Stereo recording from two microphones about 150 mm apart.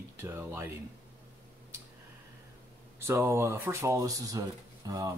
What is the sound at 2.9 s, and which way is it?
Speech, 15° right (ahead or behind).